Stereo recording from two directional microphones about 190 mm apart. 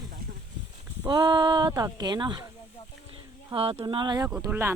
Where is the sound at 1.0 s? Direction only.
25° right (ahead or behind).